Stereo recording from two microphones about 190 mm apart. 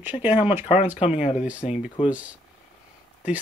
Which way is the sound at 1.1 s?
35° left (ahead or behind).